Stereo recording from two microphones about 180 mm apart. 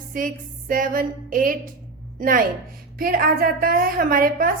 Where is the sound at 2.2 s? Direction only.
50° right (ahead or behind).